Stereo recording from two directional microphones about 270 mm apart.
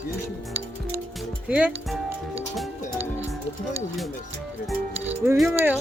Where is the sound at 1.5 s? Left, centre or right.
Centre.